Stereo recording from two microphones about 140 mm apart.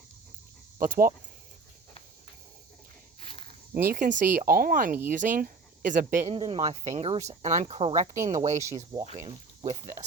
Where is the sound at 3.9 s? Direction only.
75° right (ahead or behind).